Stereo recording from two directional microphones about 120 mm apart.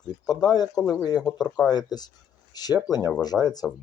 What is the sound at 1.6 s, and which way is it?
Speech, 35° left (ahead or behind).